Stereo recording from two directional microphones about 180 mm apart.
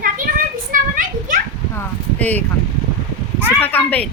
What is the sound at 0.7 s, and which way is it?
Speech, 50° right (ahead or behind).